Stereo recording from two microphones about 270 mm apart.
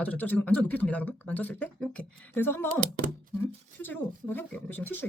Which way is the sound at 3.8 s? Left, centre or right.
Centre.